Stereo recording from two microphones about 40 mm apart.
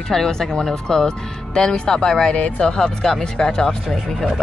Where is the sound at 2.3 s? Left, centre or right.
Left.